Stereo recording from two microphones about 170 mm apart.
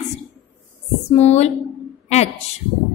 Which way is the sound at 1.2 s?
40° left (ahead or behind).